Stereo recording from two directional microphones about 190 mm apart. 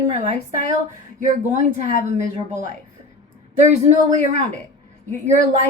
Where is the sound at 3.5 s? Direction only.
40° right (ahead or behind).